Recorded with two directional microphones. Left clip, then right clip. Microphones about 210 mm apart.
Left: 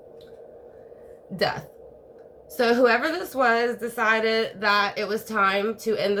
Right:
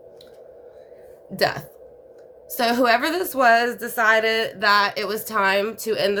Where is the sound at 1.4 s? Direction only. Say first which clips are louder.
Right 3 dB; 55° right (ahead or behind).